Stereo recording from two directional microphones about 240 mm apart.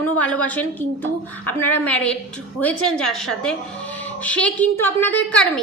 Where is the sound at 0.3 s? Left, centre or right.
Centre.